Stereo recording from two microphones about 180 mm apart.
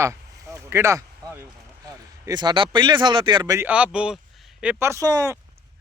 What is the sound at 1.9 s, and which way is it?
Speech, 20° right (ahead or behind).